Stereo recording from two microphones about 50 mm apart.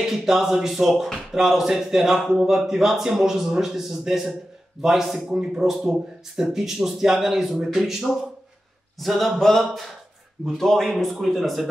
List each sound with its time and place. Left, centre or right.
0.0 s speech: centre